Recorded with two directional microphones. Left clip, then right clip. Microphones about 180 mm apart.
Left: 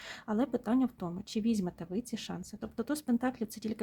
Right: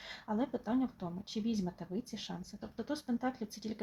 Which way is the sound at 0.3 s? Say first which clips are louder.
Left 4 dB; 35° left (ahead or behind).